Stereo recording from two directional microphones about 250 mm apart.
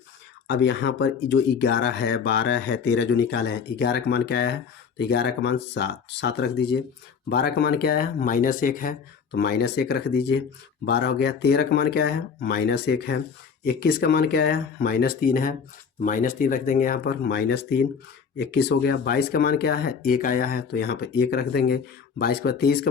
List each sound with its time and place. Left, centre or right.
0.4 s speech: left